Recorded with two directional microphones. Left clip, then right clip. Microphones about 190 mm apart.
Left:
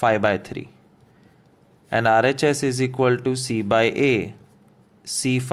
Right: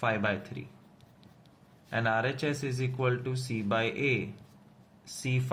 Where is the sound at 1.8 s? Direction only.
45° left (ahead or behind).